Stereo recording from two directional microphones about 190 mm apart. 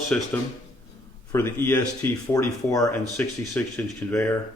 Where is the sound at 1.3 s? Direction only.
15° left (ahead or behind).